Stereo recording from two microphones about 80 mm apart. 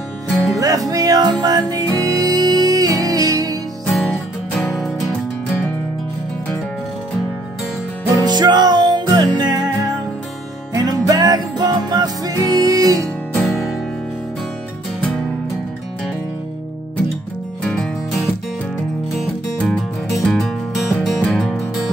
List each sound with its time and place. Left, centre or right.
0.6 s music: right
3.9 s music: centre
8.2 s music: right
10.7 s music: right
13.4 s music: centre
19.1 s music: centre